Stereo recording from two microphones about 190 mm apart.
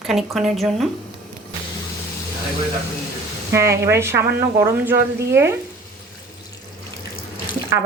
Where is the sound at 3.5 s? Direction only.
15° right (ahead or behind).